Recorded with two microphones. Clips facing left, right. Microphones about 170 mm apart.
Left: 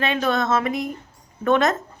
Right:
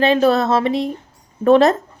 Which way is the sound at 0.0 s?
35° right (ahead or behind).